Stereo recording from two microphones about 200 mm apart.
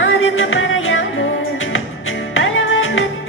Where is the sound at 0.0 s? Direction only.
80° left.